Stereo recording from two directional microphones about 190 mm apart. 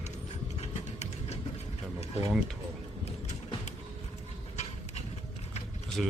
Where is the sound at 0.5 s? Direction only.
35° left (ahead or behind).